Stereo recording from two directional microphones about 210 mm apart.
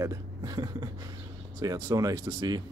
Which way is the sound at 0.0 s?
15° right (ahead or behind).